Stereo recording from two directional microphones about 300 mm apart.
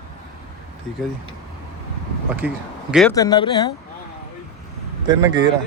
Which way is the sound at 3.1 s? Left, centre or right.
Centre.